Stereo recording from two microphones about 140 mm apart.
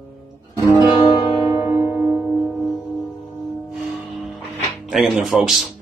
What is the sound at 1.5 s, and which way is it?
Music, 15° right (ahead or behind).